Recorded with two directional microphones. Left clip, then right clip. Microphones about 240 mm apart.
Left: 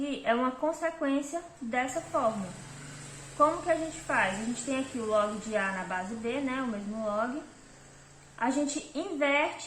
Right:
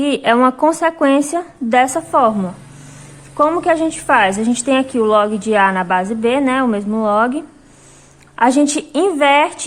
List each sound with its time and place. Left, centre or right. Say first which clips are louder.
0.0 s a woman's voice: right 16 dB; right
3.4 s a woman's voice: right 13 dB; right
8.4 s a woman's voice: right 17 dB; right